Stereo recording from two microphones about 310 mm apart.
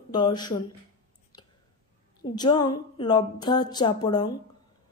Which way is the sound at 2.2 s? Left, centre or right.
Centre.